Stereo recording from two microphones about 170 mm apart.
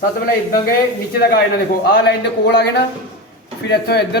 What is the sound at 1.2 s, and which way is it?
Speech, 70° left (ahead or behind).